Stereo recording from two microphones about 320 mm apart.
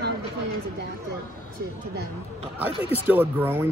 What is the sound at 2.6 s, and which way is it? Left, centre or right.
Speech, centre.